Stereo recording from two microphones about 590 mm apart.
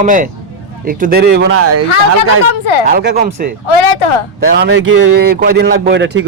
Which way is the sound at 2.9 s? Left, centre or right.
Centre.